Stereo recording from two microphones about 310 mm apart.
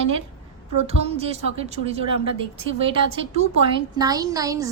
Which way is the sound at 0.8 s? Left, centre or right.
Centre.